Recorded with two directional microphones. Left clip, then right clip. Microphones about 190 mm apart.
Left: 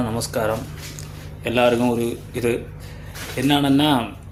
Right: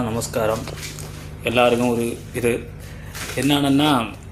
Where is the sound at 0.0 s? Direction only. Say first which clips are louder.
Right 1 dB; 10° left (ahead or behind).